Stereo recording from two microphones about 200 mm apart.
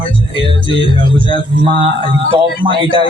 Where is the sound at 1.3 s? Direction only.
25° right (ahead or behind).